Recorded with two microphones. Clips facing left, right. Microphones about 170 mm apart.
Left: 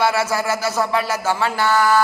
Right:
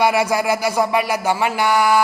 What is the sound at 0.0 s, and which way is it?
Speech, 15° right (ahead or behind).